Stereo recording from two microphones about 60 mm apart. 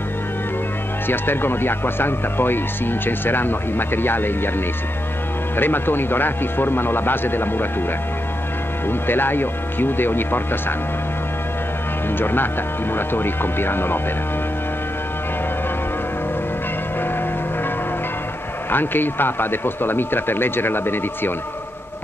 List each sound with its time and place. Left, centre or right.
1.0 s speech: left
5.6 s speech: left
8.8 s speech: left
12.2 s speech: left
18.7 s speech: left